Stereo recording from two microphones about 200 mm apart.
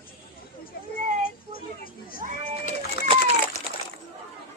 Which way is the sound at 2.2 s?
40° right (ahead or behind).